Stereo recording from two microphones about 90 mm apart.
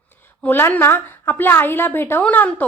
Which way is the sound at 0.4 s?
20° left (ahead or behind).